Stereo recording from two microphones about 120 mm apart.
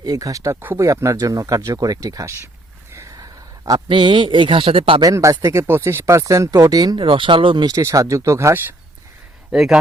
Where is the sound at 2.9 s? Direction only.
30° right (ahead or behind).